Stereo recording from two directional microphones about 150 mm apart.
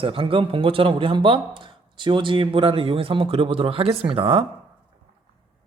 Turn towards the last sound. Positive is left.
turn(degrees=-40)  # may be behind; listen again after turning